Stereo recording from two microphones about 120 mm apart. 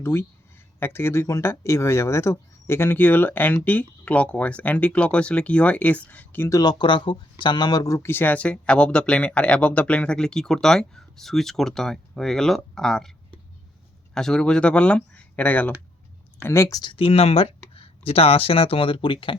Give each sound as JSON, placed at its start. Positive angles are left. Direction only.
{"t": 0.0, "sound": "speech", "side_deg": 20}
{"t": 6.5, "sound": "speech", "side_deg": 35}
{"t": 14.1, "sound": "speech", "side_deg": 5}
{"t": 16.9, "sound": "speech", "side_deg": 50}